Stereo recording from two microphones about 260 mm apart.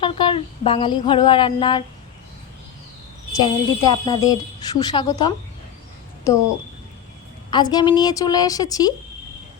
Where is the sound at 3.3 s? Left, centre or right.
Centre.